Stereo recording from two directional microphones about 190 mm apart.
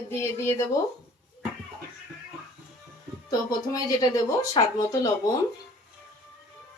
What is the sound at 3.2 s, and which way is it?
Speech, 20° left (ahead or behind).